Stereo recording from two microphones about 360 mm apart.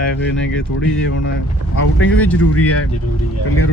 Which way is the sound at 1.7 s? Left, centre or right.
Left.